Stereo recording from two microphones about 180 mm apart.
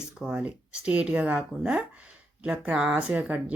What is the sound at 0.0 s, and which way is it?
A woman's voice, 5° right (ahead or behind).